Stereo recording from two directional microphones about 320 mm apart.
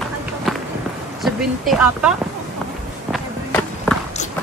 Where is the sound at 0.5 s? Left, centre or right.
Centre.